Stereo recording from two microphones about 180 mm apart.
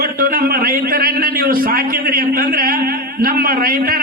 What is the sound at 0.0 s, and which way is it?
A man's voice, 55° right (ahead or behind).